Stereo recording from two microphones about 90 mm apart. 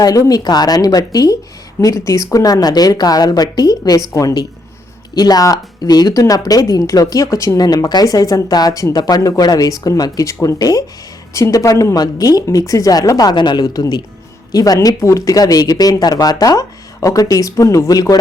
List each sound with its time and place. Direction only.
0.0 s speech: 40° left (ahead or behind)
5.1 s speech: 45° left (ahead or behind)
14.5 s speech: 40° left (ahead or behind)